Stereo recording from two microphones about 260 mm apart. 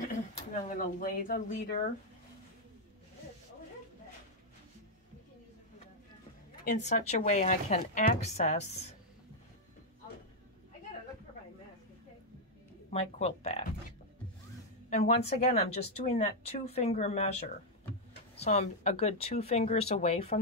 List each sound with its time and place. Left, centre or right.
0.3 s speech: left
6.6 s a woman's voice: left
12.9 s a woman's voice: left
14.9 s a woman's voice: left